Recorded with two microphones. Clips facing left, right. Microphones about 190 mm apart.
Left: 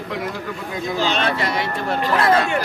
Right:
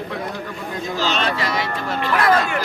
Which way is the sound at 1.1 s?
55° left (ahead or behind).